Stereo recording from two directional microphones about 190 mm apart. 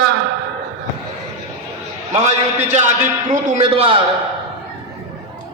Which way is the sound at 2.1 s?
35° right (ahead or behind).